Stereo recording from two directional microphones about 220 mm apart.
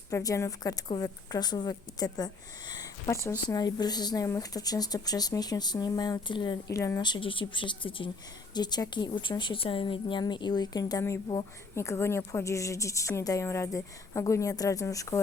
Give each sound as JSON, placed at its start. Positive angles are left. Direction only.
{"t": 0.1, "sound": "a woman's voice", "side_deg": 15}